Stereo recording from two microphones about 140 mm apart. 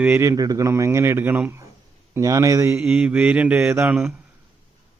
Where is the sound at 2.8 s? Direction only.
10° right (ahead or behind).